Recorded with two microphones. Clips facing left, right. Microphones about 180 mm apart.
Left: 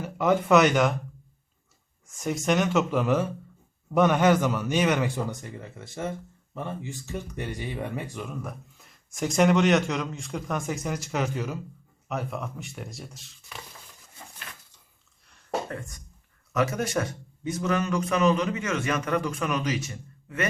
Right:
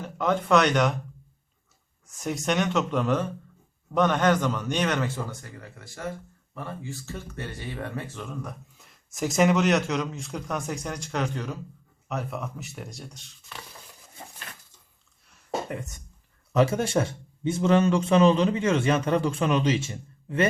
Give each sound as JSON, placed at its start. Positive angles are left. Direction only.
{"t": 0.0, "sound": "speech", "side_deg": 5}
{"t": 2.1, "sound": "a man's voice", "side_deg": 0}
{"t": 15.7, "sound": "a man's voice", "side_deg": -20}